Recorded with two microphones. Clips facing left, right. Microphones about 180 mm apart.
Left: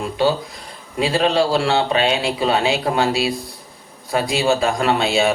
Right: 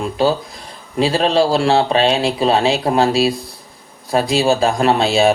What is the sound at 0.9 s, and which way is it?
Speech, 30° right (ahead or behind).